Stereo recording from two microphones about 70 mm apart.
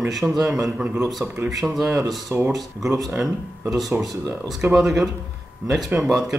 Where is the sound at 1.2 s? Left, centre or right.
Right.